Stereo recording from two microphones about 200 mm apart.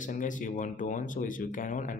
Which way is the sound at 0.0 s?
40° left (ahead or behind).